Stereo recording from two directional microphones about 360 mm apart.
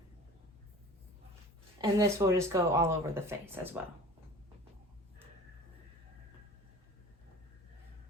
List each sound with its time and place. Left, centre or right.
1.8 s speech: centre